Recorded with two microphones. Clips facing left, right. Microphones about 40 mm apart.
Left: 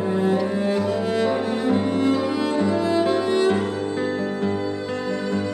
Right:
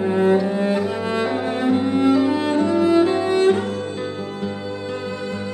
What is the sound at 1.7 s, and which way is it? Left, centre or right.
Music, right.